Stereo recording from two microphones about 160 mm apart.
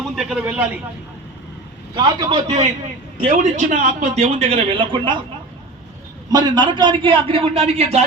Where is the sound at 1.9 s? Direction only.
30° right (ahead or behind).